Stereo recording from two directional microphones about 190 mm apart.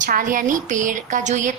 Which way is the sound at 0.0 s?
45° right (ahead or behind).